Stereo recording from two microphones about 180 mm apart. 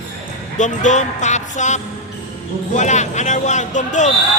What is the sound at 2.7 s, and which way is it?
Music, 40° left (ahead or behind).